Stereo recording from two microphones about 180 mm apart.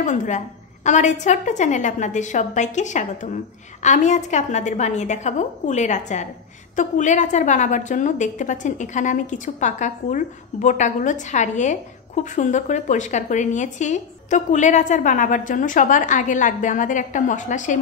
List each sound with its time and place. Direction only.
0.0 s a woman's voice: 45° left (ahead or behind)